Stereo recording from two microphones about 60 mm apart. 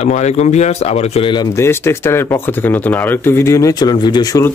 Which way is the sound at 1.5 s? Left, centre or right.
Left.